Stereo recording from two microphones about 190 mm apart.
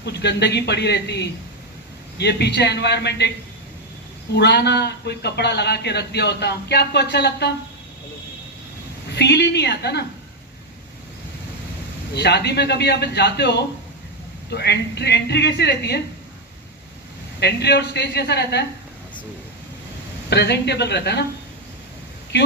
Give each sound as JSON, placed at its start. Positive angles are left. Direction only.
{"t": 0.0, "sound": "a man's voice", "side_deg": 60}
{"t": 4.4, "sound": "a man's voice", "side_deg": 60}
{"t": 9.1, "sound": "a man's voice", "side_deg": 60}
{"t": 12.1, "sound": "a man's voice", "side_deg": 60}
{"t": 17.4, "sound": "a man's voice", "side_deg": 60}
{"t": 20.3, "sound": "a man's voice", "side_deg": 60}